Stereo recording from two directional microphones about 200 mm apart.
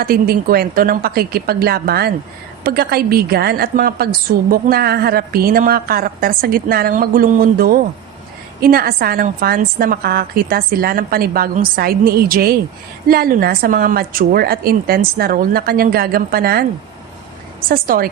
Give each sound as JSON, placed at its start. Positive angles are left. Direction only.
{"t": 0.0, "sound": "a woman's voice", "side_deg": -50}
{"t": 17.7, "sound": "a woman's voice", "side_deg": -45}